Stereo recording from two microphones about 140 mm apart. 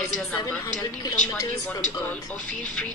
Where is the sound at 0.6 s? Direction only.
25° left (ahead or behind).